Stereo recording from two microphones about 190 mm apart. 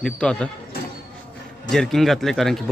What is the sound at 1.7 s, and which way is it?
Speech, centre (ahead or behind).